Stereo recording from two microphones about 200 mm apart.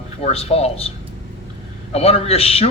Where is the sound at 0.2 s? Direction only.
30° left (ahead or behind).